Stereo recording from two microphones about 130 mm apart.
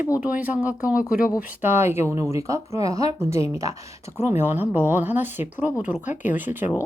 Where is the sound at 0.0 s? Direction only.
10° right (ahead or behind).